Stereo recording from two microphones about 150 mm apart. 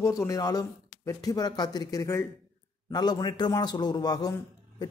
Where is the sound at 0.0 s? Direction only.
20° left (ahead or behind).